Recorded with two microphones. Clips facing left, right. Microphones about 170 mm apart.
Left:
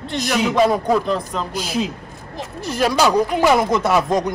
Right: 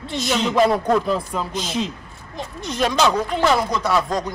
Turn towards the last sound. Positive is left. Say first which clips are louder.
# left 3 dB
turn(degrees=20)  # may be behind; listen again after turning